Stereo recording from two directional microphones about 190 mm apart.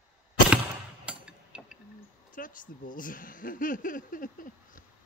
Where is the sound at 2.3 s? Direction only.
45° left (ahead or behind).